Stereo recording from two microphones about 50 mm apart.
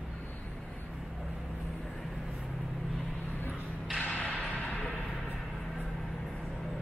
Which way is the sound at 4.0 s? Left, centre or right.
Left.